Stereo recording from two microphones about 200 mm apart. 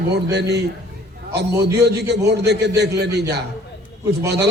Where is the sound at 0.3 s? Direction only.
55° right (ahead or behind).